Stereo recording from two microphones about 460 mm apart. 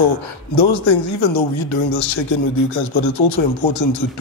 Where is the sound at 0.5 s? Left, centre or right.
Left.